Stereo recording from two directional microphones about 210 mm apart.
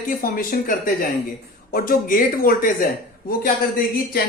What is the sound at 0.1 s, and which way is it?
A man's voice, 40° left (ahead or behind).